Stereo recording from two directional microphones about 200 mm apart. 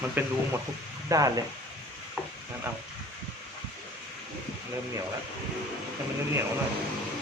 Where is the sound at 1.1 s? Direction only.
15° right (ahead or behind).